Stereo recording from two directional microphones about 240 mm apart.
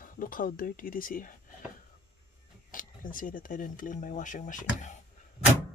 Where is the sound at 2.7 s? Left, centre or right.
Left.